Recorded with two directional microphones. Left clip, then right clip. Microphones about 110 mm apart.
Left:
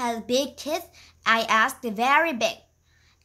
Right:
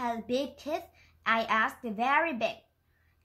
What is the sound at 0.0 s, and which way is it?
A woman's voice, 30° left (ahead or behind).